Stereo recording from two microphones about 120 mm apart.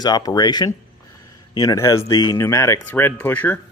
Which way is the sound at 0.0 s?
35° left (ahead or behind).